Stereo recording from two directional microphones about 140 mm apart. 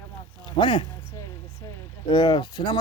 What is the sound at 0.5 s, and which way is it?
Speech, 35° left (ahead or behind).